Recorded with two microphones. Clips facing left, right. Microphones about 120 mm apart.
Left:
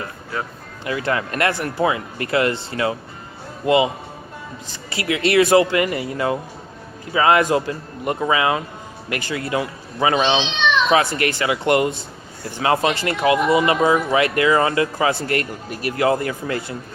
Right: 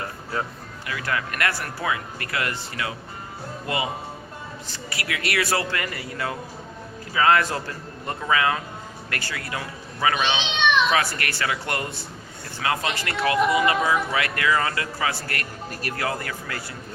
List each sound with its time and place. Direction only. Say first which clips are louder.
0.9 s speech: left 6 dB; 25° left (ahead or behind)
4.9 s a man's voice: left 9 dB; 25° left (ahead or behind)